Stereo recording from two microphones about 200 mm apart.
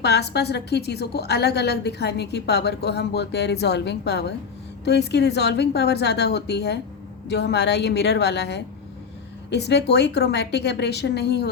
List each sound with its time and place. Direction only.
0.0 s a woman's voice: 55° left (ahead or behind)